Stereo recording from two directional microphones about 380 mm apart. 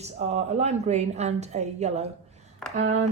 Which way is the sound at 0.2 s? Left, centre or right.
Centre.